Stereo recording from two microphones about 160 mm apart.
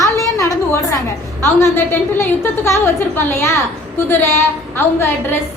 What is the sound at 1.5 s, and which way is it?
A woman's voice, 15° left (ahead or behind).